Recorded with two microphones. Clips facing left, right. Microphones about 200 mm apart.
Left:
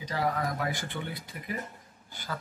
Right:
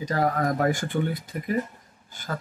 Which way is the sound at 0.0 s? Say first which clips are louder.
Right 6 dB; 45° right (ahead or behind).